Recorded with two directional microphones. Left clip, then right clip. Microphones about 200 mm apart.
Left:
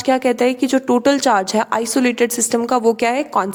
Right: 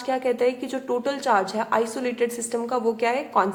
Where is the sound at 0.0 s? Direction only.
50° left (ahead or behind).